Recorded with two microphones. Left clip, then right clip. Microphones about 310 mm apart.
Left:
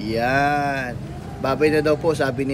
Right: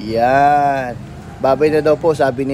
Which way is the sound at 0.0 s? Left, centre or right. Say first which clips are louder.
Right 8 dB; centre.